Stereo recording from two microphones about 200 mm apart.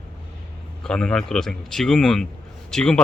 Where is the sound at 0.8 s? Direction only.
5° left (ahead or behind).